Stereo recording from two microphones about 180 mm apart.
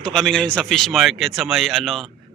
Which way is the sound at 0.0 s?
5° left (ahead or behind).